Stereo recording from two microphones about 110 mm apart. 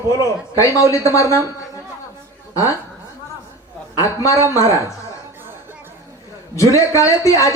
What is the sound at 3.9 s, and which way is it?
Speech, 30° left (ahead or behind).